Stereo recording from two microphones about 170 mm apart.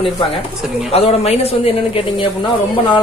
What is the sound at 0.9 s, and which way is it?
Speech, 35° left (ahead or behind).